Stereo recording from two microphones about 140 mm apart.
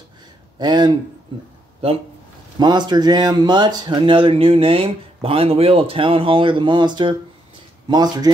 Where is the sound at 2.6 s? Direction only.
30° right (ahead or behind).